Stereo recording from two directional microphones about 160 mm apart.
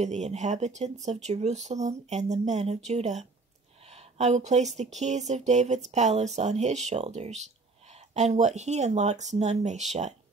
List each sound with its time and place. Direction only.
0.0 s speech: 45° right (ahead or behind)